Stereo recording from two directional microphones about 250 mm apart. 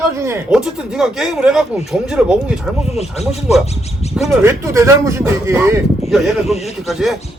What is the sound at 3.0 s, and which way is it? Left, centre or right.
Speech, left.